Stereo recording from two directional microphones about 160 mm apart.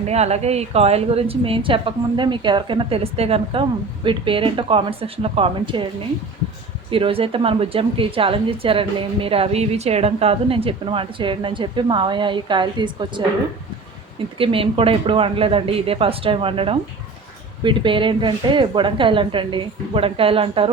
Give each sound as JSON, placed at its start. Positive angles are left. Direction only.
{"t": 0.0, "sound": "a woman's voice", "side_deg": -40}
{"t": 6.9, "sound": "a woman's voice", "side_deg": -35}
{"t": 14.3, "sound": "a woman's voice", "side_deg": -35}